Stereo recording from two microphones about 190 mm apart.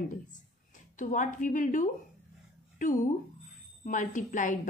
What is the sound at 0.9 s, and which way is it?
A woman's voice, 40° left (ahead or behind).